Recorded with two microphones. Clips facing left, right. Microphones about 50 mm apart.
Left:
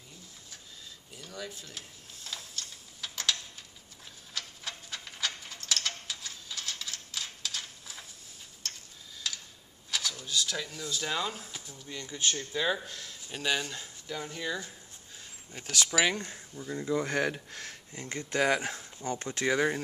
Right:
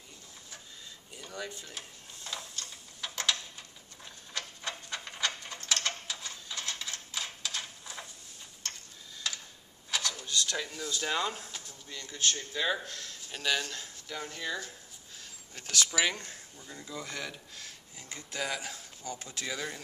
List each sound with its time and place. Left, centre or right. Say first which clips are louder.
1.1 s printer: right 1 dB; centre
9.8 s a sound: right 1 dB; centre
10.6 s speech: even; centre
12.4 s speech: left 1 dB; centre
16.9 s speech: left 10 dB; left